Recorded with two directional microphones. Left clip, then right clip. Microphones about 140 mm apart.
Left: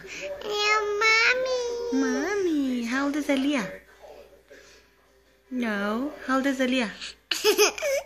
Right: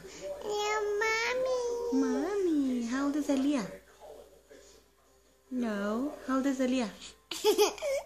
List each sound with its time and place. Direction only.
0.1 s babbling: 25° right (ahead or behind)
1.8 s baby cry: centre (ahead or behind)
2.4 s a sound: 5° left (ahead or behind)
5.6 s speech: 5° left (ahead or behind)
7.0 s laughter: 20° right (ahead or behind)